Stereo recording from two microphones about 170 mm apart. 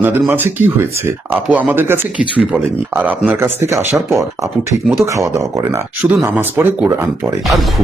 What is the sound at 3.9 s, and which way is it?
Speech, centre (ahead or behind).